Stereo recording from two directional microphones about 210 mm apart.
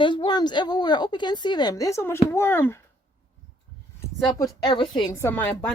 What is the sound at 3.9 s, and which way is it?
A woman's voice, 15° left (ahead or behind).